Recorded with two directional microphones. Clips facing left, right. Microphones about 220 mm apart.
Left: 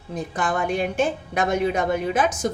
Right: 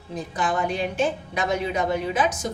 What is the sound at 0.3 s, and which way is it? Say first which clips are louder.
A woman's voice: left 1 dB; 50° left (ahead or behind).